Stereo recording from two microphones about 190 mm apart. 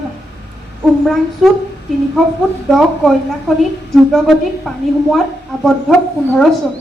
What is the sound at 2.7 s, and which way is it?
A woman's voice, centre (ahead or behind).